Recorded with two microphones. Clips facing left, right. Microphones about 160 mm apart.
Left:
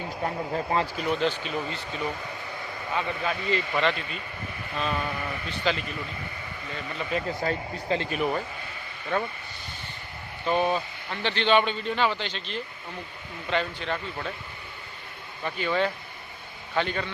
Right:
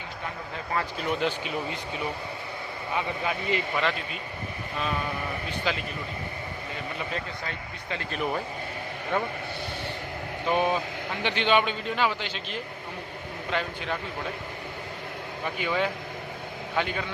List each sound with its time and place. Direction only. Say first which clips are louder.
0.3 s speech: left 6 dB; 35° left (ahead or behind)
1.1 s a man's voice: left 1 dB; 10° right (ahead or behind)
3.8 s speech: left 2 dB; 5° right (ahead or behind)
5.5 s a man's voice: left 3 dB; 5° right (ahead or behind)
7.4 s speech: left 8 dB; 35° left (ahead or behind)
8.1 s speech: left 2 dB; centre (ahead or behind)
10.5 s a man's voice: even; 10° right (ahead or behind)
15.4 s a man's voice: left 2 dB; 10° right (ahead or behind)